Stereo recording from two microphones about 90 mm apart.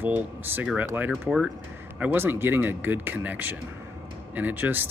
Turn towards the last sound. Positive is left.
turn(degrees=-20)  # may be behind; listen again after turning